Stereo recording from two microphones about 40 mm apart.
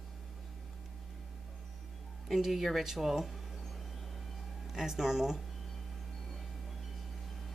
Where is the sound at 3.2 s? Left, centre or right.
Centre.